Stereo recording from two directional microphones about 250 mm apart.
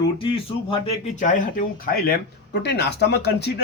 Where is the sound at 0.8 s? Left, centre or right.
Left.